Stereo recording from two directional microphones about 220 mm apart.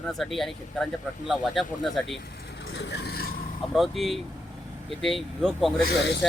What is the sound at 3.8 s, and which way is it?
Speech, centre (ahead or behind).